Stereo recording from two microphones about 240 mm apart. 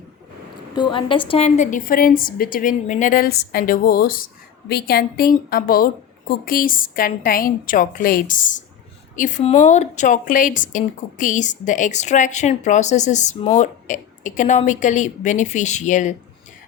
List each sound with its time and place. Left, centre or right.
0.8 s speech: centre